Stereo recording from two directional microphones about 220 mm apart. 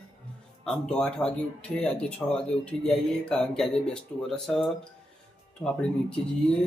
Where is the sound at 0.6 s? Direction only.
5° left (ahead or behind).